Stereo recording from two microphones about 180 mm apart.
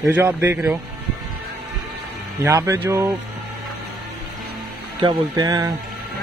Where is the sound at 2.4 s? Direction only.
15° right (ahead or behind).